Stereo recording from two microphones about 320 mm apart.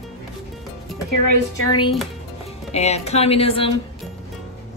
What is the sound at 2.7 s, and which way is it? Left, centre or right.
A woman's voice, centre.